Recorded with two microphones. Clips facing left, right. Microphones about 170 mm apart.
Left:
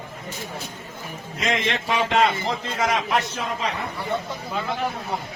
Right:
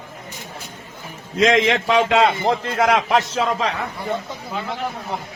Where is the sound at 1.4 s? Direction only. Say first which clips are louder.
Right 9 dB; 90° right.